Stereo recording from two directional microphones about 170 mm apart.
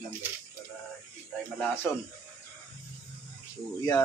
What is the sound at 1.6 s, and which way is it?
Speech, 10° left (ahead or behind).